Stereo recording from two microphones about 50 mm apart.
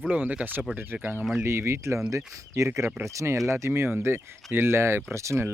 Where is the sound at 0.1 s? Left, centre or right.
Right.